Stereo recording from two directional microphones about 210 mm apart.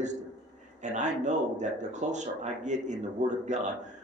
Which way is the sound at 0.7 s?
35° right (ahead or behind).